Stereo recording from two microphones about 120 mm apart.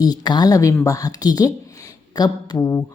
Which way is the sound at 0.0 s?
35° left (ahead or behind).